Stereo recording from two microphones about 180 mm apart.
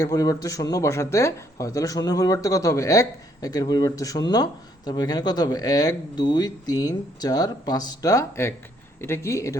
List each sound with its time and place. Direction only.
0.0 s speech: 20° left (ahead or behind)